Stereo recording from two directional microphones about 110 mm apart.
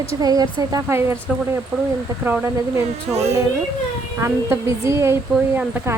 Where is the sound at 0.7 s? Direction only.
25° right (ahead or behind).